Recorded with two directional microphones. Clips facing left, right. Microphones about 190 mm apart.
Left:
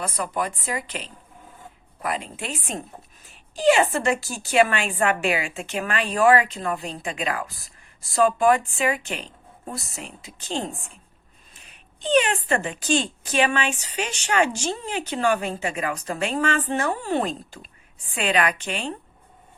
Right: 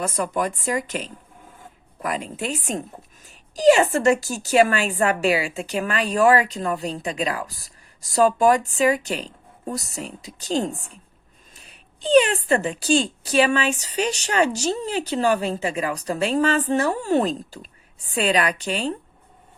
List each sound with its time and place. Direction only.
0.0 s speech: 45° right (ahead or behind)